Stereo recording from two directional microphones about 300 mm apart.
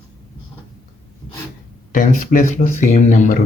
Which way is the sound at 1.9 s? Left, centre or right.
Left.